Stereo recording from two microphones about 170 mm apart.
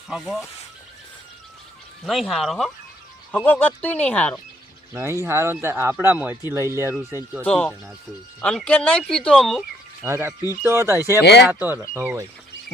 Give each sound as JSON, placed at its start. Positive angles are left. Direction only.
{"t": 0.1, "sound": "speech", "side_deg": 0}
{"t": 2.0, "sound": "speech", "side_deg": 0}
{"t": 4.9, "sound": "speech", "side_deg": -15}
{"t": 7.4, "sound": "speech", "side_deg": 5}
{"t": 10.0, "sound": "speech", "side_deg": -15}
{"t": 11.2, "sound": "speech", "side_deg": 80}
{"t": 11.4, "sound": "speech", "side_deg": -10}